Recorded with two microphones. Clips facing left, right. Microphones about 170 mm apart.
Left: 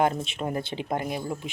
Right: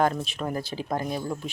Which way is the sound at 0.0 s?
20° left (ahead or behind).